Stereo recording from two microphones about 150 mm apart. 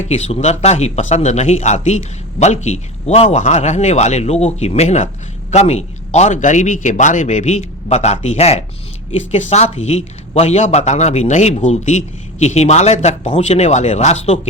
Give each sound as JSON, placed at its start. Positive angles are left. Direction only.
{"t": 0.0, "sound": "speech", "side_deg": 45}